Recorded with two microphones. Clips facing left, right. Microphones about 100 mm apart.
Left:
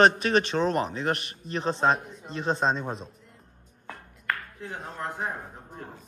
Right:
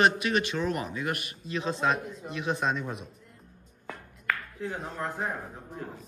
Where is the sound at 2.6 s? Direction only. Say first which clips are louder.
Left 3 dB; 25° left (ahead or behind).